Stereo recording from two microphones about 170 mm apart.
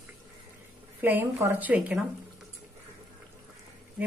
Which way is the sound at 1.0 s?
10° right (ahead or behind).